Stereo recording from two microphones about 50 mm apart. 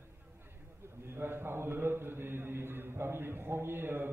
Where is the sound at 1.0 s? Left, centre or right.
Right.